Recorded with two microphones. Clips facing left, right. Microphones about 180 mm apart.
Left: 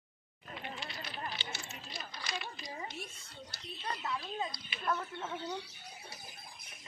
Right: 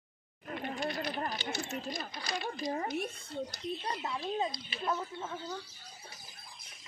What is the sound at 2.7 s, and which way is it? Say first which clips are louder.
Speech: right 9 dB; 60° right (ahead or behind).